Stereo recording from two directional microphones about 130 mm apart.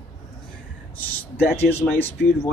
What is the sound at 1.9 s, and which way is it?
Speech, 15° left (ahead or behind).